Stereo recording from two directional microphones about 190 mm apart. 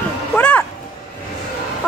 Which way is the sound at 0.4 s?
5° left (ahead or behind).